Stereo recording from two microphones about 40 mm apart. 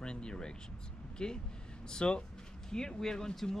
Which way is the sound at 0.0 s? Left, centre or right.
Left.